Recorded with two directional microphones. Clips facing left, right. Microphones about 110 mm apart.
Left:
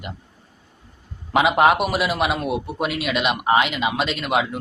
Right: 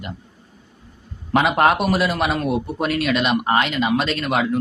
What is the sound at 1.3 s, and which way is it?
A man's voice, 5° left (ahead or behind).